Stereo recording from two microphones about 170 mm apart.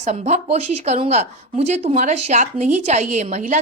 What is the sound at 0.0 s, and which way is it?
A woman's voice, 40° right (ahead or behind).